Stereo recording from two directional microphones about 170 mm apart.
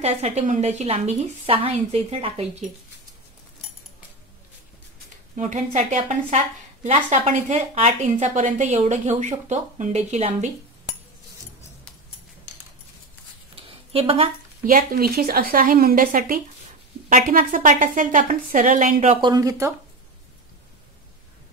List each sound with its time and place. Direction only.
0.0 s a woman's voice: 40° right (ahead or behind)
5.3 s a woman's voice: 45° right (ahead or behind)
13.6 s a sound: 30° right (ahead or behind)
14.6 s a woman's voice: 55° right (ahead or behind)
19.2 s speech: 20° right (ahead or behind)